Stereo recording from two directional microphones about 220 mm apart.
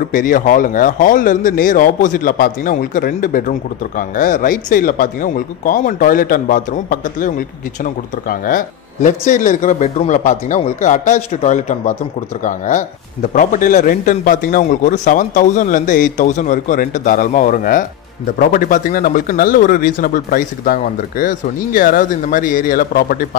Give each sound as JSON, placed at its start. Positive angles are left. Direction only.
{"t": 0.1, "sound": "speech", "side_deg": 40}